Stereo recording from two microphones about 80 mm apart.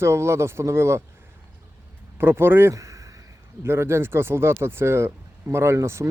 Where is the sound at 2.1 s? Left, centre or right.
Right.